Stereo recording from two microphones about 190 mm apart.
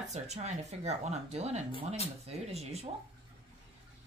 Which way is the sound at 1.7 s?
30° left (ahead or behind).